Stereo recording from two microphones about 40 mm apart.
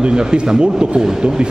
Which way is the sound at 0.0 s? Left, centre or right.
Right.